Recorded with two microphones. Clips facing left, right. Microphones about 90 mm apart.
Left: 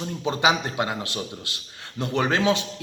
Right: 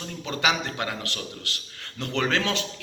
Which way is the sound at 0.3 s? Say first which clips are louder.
Left 4 dB; 20° left (ahead or behind).